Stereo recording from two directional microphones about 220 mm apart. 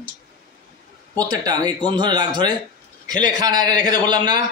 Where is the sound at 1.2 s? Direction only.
15° right (ahead or behind).